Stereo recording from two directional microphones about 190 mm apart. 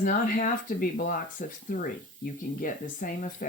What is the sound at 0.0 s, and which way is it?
Speech, 45° left (ahead or behind).